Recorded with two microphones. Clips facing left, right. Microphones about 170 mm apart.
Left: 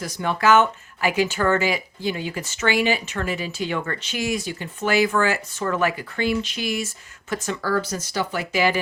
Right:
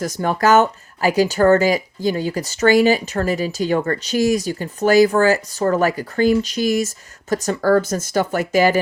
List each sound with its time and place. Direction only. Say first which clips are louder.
0.0 s speech: right 4 dB; 45° right (ahead or behind)